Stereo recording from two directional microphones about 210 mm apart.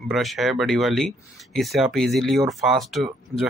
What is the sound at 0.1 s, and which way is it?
Speech, centre (ahead or behind).